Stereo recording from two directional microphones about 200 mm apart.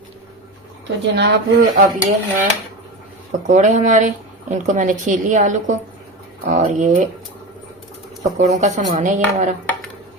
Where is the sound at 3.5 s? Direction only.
35° right (ahead or behind).